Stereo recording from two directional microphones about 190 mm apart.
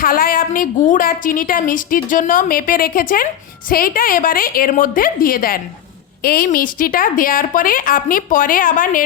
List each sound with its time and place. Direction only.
0.0 s a woman's voice: 50° left (ahead or behind)